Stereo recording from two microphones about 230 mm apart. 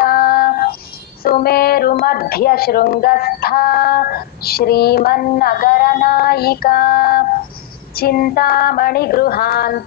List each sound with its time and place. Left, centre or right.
0.0 s music: left
1.2 s a woman's voice: left